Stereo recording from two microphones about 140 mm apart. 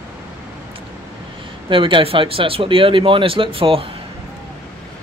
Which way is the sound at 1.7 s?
40° right (ahead or behind).